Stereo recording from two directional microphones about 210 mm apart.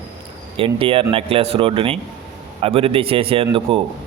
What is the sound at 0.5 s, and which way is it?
Speech, 25° right (ahead or behind).